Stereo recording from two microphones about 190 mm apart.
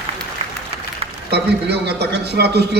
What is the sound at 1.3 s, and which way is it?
A man's voice, 60° right (ahead or behind).